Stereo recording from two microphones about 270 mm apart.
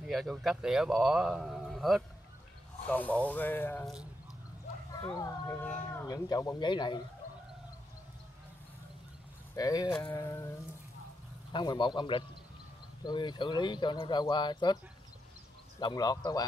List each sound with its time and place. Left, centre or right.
0.0 s speech: centre
5.0 s speech: centre
9.6 s speech: centre
11.5 s speech: centre
15.8 s speech: centre